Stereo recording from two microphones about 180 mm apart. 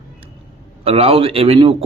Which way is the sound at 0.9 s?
30° right (ahead or behind).